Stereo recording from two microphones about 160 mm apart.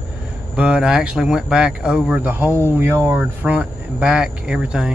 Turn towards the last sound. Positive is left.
turn(degrees=-5)  # may be behind; listen again after turning